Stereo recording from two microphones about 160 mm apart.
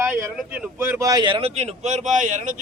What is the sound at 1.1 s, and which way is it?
Speech, 30° right (ahead or behind).